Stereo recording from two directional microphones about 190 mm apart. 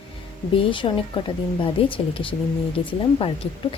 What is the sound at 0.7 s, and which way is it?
A woman's voice, 25° left (ahead or behind).